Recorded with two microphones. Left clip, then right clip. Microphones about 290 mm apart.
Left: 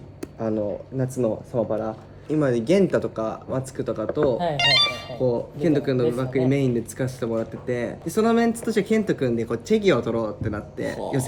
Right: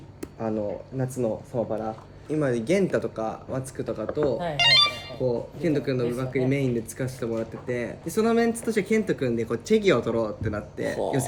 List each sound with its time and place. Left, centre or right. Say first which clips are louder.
0.2 s a sound: left 3 dB; centre
0.9 s speech: left 4 dB; centre
4.5 s speech: right 4 dB; centre